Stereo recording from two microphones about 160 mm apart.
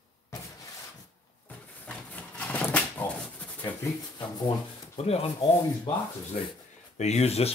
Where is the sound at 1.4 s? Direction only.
10° left (ahead or behind).